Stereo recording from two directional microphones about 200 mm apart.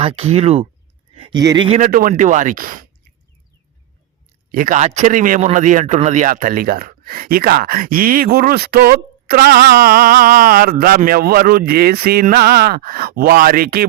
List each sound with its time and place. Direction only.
0.0 s speech: 30° right (ahead or behind)
1.8 s speech: 45° right (ahead or behind)
4.5 s a man's voice: 40° right (ahead or behind)